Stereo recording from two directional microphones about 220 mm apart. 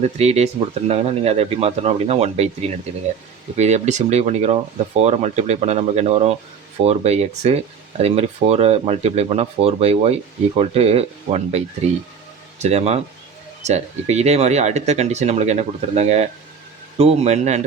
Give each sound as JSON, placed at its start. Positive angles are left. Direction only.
{"t": 0.0, "sound": "speech", "side_deg": -30}